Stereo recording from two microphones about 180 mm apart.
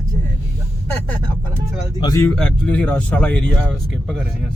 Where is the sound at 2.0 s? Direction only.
20° left (ahead or behind).